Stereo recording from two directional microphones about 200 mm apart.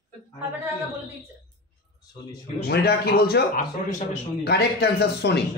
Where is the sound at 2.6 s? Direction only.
55° left (ahead or behind).